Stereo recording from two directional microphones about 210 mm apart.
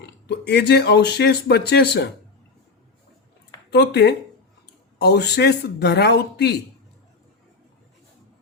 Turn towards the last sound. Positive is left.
turn(degrees=50)  # may be behind; listen again after turning